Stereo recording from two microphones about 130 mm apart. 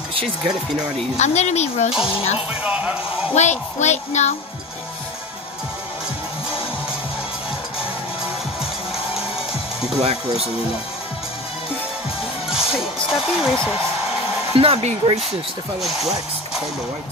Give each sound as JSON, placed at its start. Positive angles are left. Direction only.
{"t": 1.1, "sound": "speech", "side_deg": 60}
{"t": 2.6, "sound": "speech", "side_deg": -10}
{"t": 3.3, "sound": "speech", "side_deg": 65}
{"t": 10.0, "sound": "speech", "side_deg": -50}
{"t": 12.4, "sound": "speech", "side_deg": -5}
{"t": 14.5, "sound": "speech", "side_deg": -50}
{"t": 15.8, "sound": "speech", "side_deg": 0}